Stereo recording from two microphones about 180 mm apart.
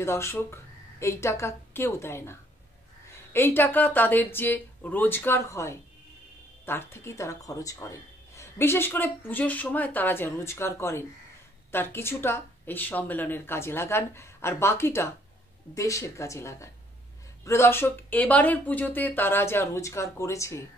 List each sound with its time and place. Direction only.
0.0 s a woman's voice: 15° left (ahead or behind)